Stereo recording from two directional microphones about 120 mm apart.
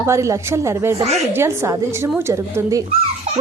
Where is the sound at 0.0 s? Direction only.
25° right (ahead or behind).